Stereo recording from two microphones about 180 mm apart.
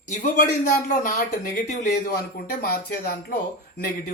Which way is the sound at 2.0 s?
55° left (ahead or behind).